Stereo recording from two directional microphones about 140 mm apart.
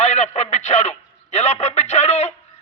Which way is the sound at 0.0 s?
55° left (ahead or behind).